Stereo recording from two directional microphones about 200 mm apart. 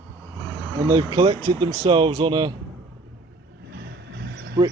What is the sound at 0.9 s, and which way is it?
Speech, 20° right (ahead or behind).